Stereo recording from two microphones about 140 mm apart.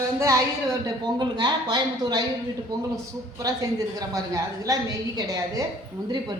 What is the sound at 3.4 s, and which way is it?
A woman's voice, 25° right (ahead or behind).